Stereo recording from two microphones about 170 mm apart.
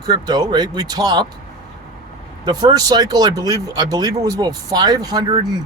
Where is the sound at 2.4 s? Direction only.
25° right (ahead or behind).